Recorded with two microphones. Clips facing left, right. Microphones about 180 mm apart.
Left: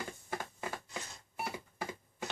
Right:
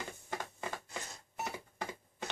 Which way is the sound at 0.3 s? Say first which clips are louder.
Even; 5° left (ahead or behind).